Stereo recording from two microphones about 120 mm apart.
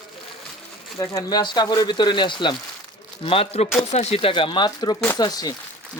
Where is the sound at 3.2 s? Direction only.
55° left (ahead or behind).